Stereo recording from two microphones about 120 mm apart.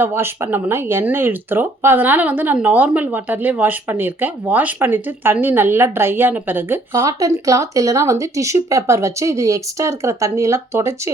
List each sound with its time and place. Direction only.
0.0 s speech: 20° right (ahead or behind)